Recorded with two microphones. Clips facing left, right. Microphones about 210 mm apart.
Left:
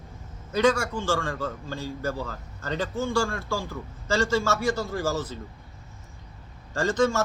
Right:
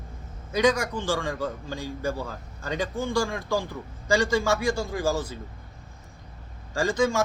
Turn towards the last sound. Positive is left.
turn(degrees=-10)  # may be behind; listen again after turning